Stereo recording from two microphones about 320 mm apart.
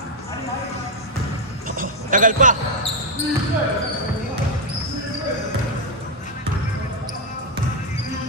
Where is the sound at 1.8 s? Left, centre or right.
Right.